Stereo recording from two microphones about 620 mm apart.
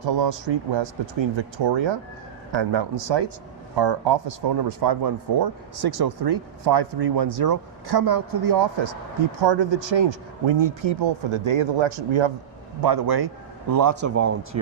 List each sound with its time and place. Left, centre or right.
0.0 s speech: right
12.8 s speech: right